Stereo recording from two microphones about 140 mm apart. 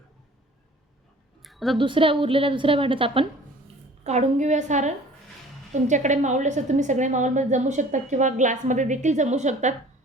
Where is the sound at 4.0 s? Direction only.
55° right (ahead or behind).